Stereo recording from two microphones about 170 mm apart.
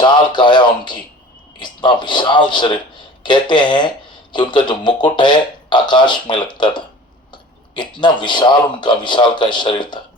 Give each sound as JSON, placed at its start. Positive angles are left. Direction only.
{"t": 0.0, "sound": "speech", "side_deg": 25}
{"t": 8.0, "sound": "speech", "side_deg": 25}